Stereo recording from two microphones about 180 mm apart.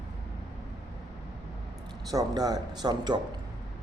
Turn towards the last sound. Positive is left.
turn(degrees=-20)  # may be behind; listen again after turning